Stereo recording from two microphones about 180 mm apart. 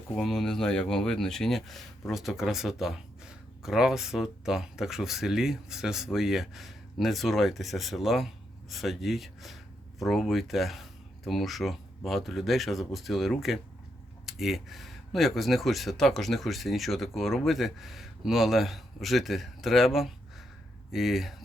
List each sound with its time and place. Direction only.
0.2 s speech: centre (ahead or behind)